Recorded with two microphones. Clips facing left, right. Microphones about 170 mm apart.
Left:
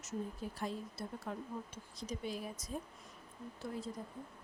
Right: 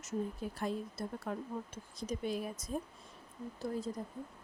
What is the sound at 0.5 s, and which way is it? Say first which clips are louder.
A woman's voice: right 5 dB; 55° right (ahead or behind).